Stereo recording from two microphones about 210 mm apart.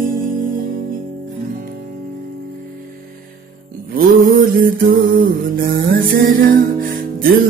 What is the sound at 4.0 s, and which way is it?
Mantra, 45° right (ahead or behind).